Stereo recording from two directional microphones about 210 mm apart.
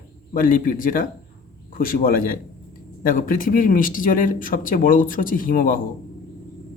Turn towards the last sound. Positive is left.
turn(degrees=40)  # may be behind; listen again after turning